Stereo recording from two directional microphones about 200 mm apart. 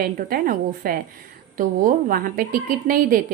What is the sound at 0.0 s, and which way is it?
A woman's voice, 45° right (ahead or behind).